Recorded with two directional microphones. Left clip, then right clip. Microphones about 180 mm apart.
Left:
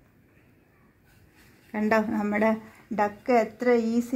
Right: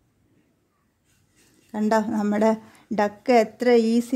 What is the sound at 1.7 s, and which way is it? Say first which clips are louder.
A woman's voice: right 2 dB; 50° right (ahead or behind).